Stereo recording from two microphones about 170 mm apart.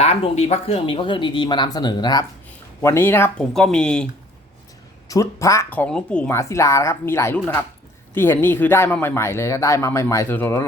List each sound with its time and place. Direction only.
0.0 s speech: 40° left (ahead or behind)
2.8 s a woman's voice: 15° left (ahead or behind)
5.0 s a woman's voice: 20° left (ahead or behind)